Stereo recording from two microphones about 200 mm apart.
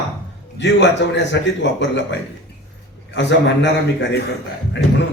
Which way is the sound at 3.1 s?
65° left (ahead or behind).